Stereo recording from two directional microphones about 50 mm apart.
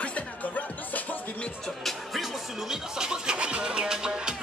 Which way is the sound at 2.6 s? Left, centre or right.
Centre.